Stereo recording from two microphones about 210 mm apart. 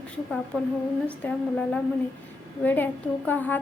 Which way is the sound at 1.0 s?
5° left (ahead or behind).